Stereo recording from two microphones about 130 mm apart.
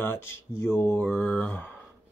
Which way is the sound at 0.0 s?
15° left (ahead or behind).